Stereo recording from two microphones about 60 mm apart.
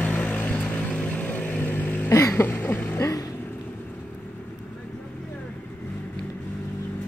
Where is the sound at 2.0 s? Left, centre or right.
Left.